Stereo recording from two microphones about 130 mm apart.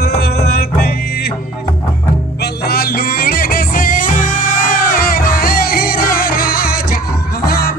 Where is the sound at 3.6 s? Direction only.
90° left.